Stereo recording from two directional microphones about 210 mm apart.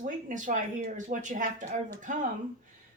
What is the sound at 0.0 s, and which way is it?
Speech, 35° right (ahead or behind).